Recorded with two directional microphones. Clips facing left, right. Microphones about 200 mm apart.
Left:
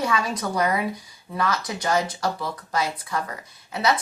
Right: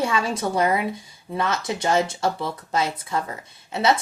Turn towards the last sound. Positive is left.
turn(degrees=-25)  # may be behind; listen again after turning